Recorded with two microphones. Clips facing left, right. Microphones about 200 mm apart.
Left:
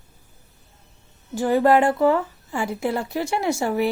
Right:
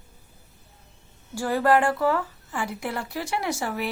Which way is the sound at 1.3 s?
20° left (ahead or behind).